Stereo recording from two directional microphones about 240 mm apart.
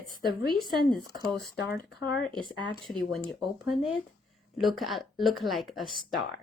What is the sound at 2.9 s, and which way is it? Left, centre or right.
A woman's voice, centre.